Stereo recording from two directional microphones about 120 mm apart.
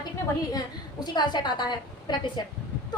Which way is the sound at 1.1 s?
35° left (ahead or behind).